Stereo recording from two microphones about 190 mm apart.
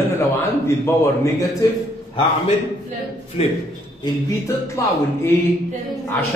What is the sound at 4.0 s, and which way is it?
A man's voice, 15° left (ahead or behind).